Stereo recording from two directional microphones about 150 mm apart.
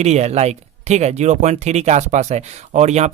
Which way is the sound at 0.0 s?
45° right (ahead or behind).